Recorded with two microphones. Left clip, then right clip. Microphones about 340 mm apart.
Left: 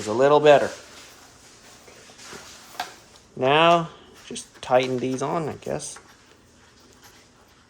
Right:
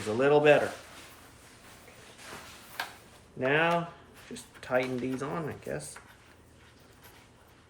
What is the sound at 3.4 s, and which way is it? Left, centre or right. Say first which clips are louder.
Speech: left 9 dB; centre.